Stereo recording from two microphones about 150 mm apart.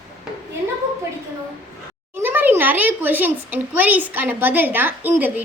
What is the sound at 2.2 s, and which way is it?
A child's voice, 10° right (ahead or behind).